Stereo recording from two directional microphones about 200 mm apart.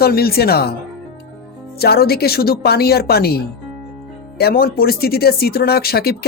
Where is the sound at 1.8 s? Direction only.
50° left (ahead or behind).